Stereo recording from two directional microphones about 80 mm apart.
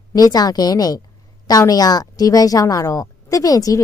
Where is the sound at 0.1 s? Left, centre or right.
Left.